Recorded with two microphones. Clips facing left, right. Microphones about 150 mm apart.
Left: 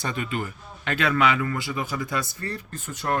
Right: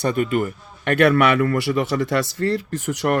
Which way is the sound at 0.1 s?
50° right (ahead or behind).